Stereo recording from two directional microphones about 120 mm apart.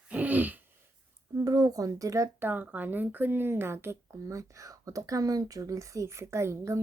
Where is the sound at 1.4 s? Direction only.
30° right (ahead or behind).